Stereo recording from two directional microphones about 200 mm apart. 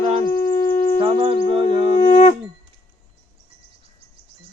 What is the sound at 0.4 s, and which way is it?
Shofar, 40° left (ahead or behind).